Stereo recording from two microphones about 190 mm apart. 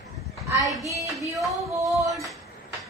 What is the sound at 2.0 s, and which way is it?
Speech, 15° right (ahead or behind).